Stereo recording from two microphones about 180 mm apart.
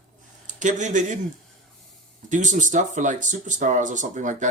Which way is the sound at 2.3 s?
45° right (ahead or behind).